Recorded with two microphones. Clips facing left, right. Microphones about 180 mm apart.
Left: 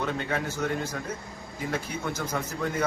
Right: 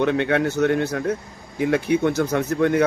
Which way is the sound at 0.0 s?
70° right (ahead or behind).